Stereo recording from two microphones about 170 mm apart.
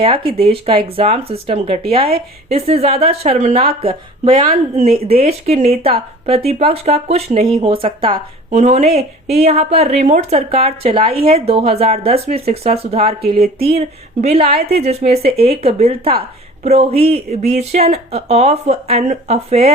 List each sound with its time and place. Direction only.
0.0 s speech: 30° right (ahead or behind)
8.4 s speech: 45° right (ahead or behind)
11.0 s a woman's voice: 60° right (ahead or behind)
11.3 s speech: 35° right (ahead or behind)
13.2 s a woman's voice: 65° right (ahead or behind)
13.7 s speech: 35° right (ahead or behind)